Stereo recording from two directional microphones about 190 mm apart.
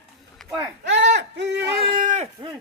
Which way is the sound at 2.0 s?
40° right (ahead or behind).